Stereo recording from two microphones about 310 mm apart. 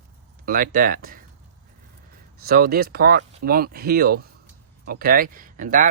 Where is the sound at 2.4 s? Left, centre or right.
Right.